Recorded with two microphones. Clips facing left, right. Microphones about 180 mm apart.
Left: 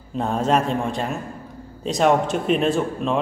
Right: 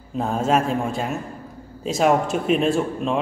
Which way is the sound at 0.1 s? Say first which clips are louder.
Even; centre (ahead or behind).